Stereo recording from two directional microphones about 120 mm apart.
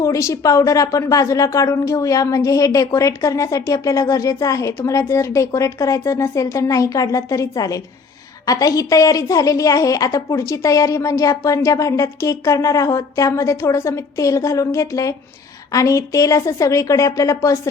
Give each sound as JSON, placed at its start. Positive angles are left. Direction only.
{"t": 0.0, "sound": "a woman's voice", "side_deg": 25}